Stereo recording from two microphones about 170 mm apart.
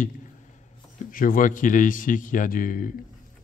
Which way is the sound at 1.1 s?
55° left (ahead or behind).